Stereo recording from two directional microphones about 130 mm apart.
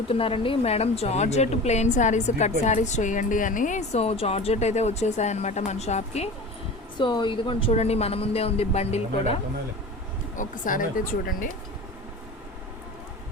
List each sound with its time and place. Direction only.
0.1 s a woman's voice: 45° left (ahead or behind)
6.9 s speech: 35° left (ahead or behind)
7.7 s speech: 55° left (ahead or behind)
10.3 s speech: 90° left